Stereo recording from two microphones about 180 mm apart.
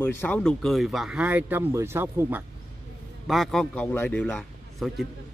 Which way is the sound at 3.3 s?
Centre (ahead or behind).